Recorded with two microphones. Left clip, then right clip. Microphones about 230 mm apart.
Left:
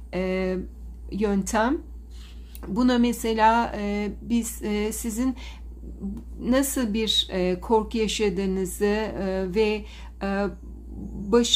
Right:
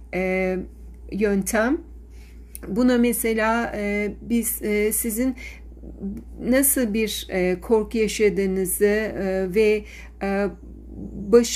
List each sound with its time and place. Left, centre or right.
0.1 s speech: centre